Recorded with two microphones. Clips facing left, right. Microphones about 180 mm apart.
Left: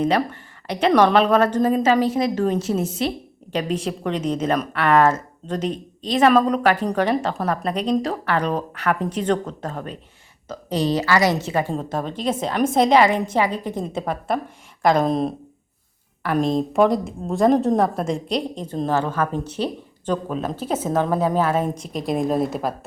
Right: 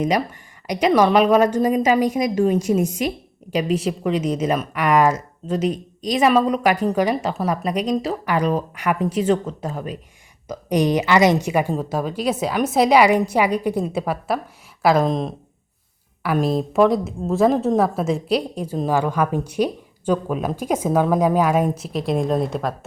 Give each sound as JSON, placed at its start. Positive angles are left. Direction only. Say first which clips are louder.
{"t": 0.7, "sound": "a woman's voice", "louder": "even", "side_deg": -10}